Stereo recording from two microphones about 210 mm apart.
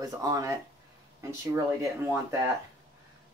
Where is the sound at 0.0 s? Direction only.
15° right (ahead or behind).